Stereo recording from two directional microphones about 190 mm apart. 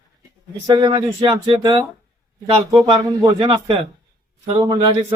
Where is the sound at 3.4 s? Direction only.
25° right (ahead or behind).